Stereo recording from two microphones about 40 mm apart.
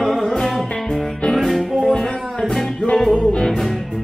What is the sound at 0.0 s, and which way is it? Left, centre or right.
Music, centre.